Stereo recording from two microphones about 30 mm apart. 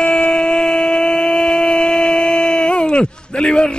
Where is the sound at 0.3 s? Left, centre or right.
Left.